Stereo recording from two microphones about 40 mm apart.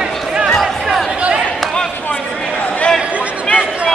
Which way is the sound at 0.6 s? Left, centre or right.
Centre.